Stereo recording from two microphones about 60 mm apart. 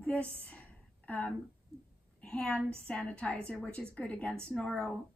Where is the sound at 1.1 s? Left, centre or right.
Left.